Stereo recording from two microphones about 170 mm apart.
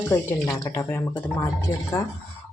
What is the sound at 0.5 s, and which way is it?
Speech, 20° left (ahead or behind).